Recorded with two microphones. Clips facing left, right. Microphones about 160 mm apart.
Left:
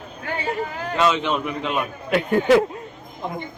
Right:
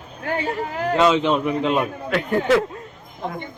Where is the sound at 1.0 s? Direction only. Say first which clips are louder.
Right 3 dB; 25° right (ahead or behind).